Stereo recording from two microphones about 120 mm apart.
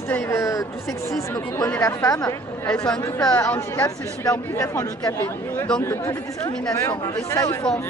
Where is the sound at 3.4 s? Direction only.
20° left (ahead or behind).